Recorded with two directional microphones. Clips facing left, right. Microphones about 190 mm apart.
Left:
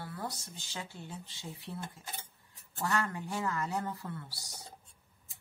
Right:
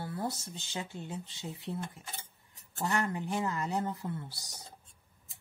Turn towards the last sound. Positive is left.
turn(degrees=-20)  # may be behind; listen again after turning